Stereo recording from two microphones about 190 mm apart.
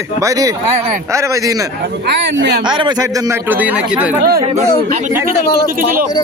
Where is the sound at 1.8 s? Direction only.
65° right (ahead or behind).